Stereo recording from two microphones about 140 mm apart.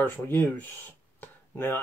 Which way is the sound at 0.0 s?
15° left (ahead or behind).